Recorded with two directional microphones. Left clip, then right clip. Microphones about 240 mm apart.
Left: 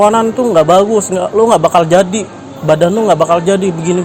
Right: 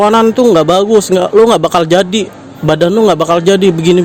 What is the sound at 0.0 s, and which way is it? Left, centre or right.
Speech, right.